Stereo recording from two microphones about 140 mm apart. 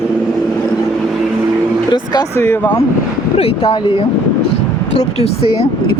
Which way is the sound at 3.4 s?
40° left (ahead or behind).